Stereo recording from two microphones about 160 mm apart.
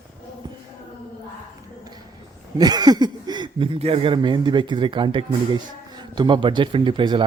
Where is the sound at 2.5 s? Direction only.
25° right (ahead or behind).